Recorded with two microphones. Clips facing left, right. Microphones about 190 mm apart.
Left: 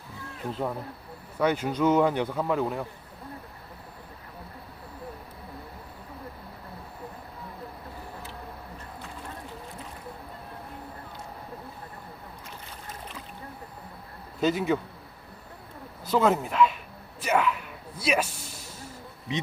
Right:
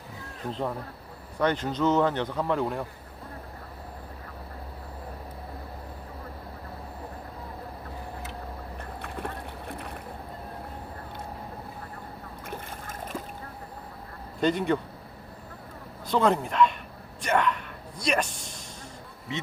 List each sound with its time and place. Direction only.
1.4 s speech: 10° left (ahead or behind)
9.0 s boat: 60° right (ahead or behind)
12.5 s boat: 50° right (ahead or behind)
14.4 s a man's voice: 5° left (ahead or behind)
16.0 s speech: 5° left (ahead or behind)
17.2 s a sound: 5° left (ahead or behind)
19.3 s speech: 15° left (ahead or behind)